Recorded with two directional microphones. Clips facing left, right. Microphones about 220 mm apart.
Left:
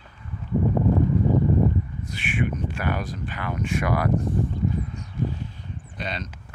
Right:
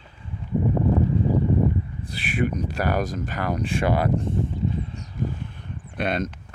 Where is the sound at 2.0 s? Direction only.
35° right (ahead or behind).